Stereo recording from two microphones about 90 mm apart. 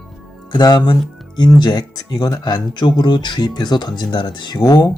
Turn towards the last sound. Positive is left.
turn(degrees=45)  # may be behind; listen again after turning